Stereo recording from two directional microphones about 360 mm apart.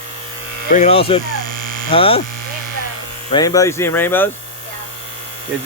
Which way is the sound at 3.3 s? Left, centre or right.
Centre.